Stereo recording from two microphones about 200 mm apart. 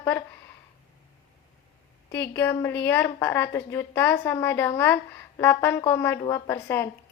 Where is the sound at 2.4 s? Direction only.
10° left (ahead or behind).